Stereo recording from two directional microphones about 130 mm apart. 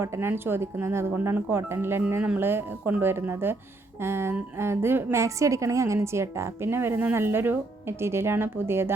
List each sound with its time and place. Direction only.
0.0 s a woman's voice: 20° right (ahead or behind)